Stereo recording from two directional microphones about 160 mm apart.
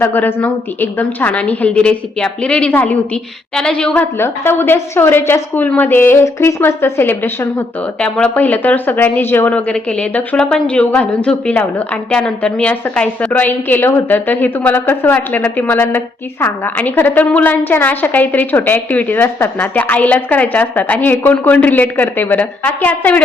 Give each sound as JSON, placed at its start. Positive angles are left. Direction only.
{"t": 0.0, "sound": "a woman's voice", "side_deg": 10}